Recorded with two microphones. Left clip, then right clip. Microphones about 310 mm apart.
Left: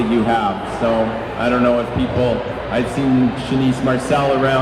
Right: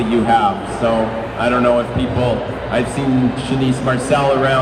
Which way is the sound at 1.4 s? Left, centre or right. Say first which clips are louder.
Right 2 dB; right.